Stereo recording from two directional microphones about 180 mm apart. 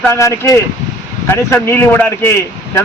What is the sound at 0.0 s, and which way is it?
A man's voice, 15° left (ahead or behind).